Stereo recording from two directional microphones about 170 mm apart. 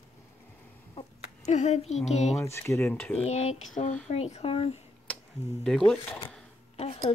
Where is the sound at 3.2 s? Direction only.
40° left (ahead or behind).